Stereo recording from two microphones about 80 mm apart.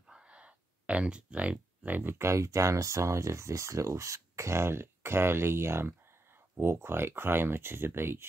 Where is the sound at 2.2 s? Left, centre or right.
Right.